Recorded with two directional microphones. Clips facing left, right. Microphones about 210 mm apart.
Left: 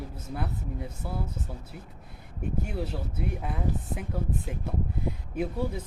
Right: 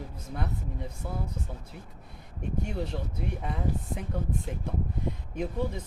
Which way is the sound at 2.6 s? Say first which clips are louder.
Right 1 dB; 5° left (ahead or behind).